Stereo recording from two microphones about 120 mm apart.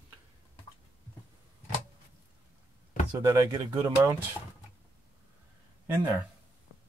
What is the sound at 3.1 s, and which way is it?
Speech, 25° right (ahead or behind).